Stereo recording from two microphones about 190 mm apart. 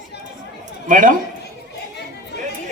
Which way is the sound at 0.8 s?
45° right (ahead or behind).